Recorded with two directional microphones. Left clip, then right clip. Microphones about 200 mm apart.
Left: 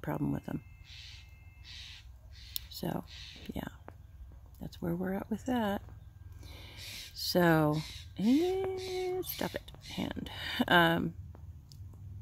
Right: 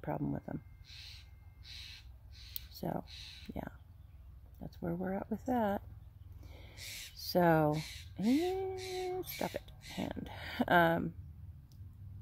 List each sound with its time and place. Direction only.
0.0 s speech: 20° left (ahead or behind)
0.8 s crow: 10° right (ahead or behind)
2.5 s a sound: 15° left (ahead or behind)
3.1 s speech: 10° right (ahead or behind)
4.6 s speech: 15° left (ahead or behind)